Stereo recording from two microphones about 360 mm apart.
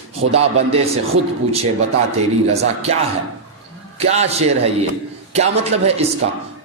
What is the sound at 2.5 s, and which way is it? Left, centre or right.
Speech, centre.